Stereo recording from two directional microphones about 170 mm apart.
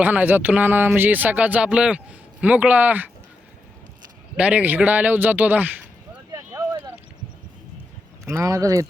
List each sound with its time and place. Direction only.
0.0 s a man's voice: 10° right (ahead or behind)
4.4 s a man's voice: 5° right (ahead or behind)
6.3 s a sound: 20° right (ahead or behind)
8.3 s speech: 15° right (ahead or behind)